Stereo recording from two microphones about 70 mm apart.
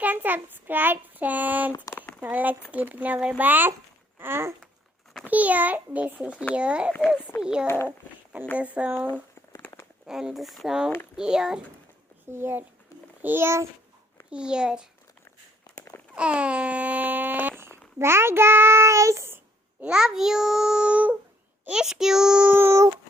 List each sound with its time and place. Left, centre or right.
0.0 s child singing: right
4.2 s a child's voice: right
5.2 s child singing: right
6.5 s a child's voice: centre
7.9 s speech: right
8.5 s child singing: centre
10.1 s a child's voice: centre
12.3 s a child's voice: right
14.3 s a child's voice: centre
16.1 s a sound: centre
17.6 s a child's voice: right
19.8 s a child's voice: centre
22.5 s a child's voice: right